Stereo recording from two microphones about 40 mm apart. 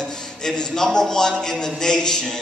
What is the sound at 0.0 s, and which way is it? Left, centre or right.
A man's voice, centre.